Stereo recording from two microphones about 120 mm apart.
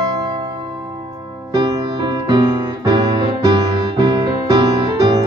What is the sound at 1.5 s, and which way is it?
Music, 35° right (ahead or behind).